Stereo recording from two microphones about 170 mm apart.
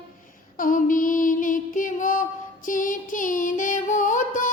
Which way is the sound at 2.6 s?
50° left (ahead or behind).